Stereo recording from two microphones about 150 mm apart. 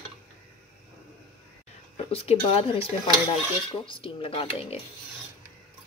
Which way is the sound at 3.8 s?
35° left (ahead or behind).